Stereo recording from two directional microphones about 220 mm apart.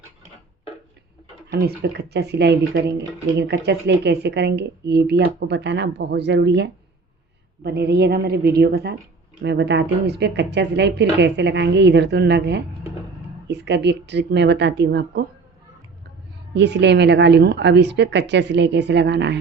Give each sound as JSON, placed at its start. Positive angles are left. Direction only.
{"t": 1.5, "sound": "speech", "side_deg": -45}
{"t": 16.6, "sound": "speech", "side_deg": -50}